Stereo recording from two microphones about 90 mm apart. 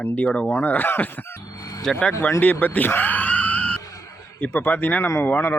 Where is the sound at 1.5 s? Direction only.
40° left (ahead or behind).